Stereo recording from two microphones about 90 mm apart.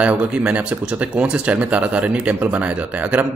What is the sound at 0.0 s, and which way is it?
Speech, 15° right (ahead or behind).